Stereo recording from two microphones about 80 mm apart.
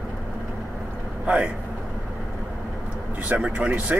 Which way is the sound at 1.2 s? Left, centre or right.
Centre.